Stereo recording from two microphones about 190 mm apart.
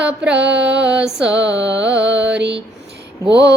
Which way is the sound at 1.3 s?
70° right (ahead or behind).